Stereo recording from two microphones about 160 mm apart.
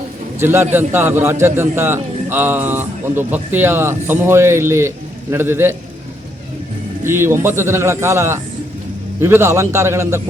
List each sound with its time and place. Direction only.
0.3 s a man's voice: 15° right (ahead or behind)
7.0 s a man's voice: 15° right (ahead or behind)